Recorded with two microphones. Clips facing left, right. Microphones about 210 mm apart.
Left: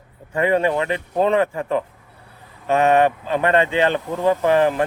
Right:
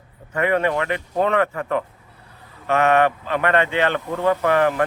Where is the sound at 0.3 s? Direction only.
30° left (ahead or behind).